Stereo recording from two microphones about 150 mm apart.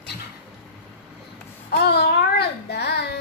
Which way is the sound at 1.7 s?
90° left.